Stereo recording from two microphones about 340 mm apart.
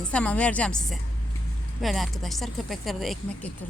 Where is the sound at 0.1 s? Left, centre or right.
Centre.